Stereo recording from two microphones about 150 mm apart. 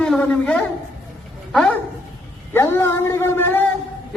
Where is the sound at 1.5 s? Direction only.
5° left (ahead or behind).